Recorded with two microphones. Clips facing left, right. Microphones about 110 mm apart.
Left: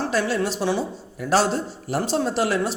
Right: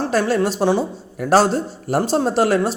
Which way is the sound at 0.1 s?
45° right (ahead or behind).